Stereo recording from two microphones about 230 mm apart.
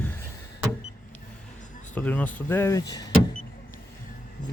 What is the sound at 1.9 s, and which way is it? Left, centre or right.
Speech, centre.